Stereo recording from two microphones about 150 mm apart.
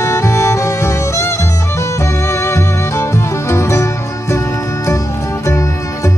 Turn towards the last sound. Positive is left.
turn(degrees=20)  # may be behind; listen again after turning